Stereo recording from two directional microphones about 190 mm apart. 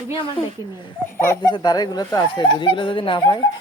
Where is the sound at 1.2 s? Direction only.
15° left (ahead or behind).